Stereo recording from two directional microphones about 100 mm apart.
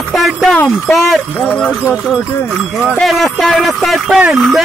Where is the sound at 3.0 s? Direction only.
Centre (ahead or behind).